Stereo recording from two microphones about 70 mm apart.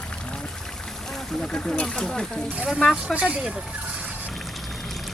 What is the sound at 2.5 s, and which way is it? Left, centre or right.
Speech, centre.